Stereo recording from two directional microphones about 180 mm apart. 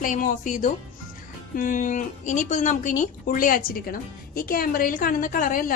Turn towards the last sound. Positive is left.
turn(degrees=50)  # may be behind; listen again after turning